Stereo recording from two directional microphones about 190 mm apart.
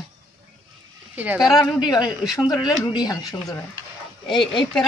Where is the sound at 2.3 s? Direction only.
20° left (ahead or behind).